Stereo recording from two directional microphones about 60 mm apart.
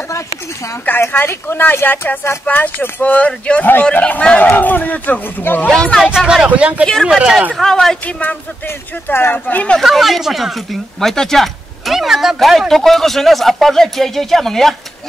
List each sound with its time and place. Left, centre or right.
1.0 s speech: left; by 4.4 s centre
4.4 s speech: left
5.7 s speech: centre
6.1 s speech: centre
6.4 s speech: right
7.6 s speech: centre
9.0 s speech: left
9.8 s speech: centre